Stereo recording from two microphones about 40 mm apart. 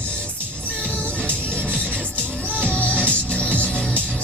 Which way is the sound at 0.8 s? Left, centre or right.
Left.